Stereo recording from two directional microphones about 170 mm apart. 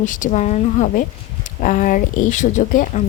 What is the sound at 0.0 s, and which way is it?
A woman's voice, 50° left (ahead or behind).